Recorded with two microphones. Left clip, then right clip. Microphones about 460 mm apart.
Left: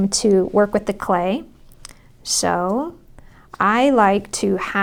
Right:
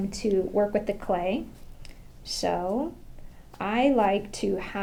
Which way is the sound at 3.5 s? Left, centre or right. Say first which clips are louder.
Left 9 dB; left.